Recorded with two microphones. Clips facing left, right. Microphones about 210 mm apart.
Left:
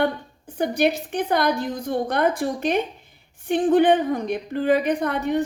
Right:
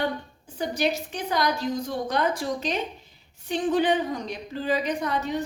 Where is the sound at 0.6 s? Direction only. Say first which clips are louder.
Left 5 dB; 55° left (ahead or behind).